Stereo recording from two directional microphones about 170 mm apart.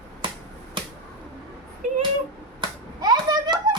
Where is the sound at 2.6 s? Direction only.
25° right (ahead or behind).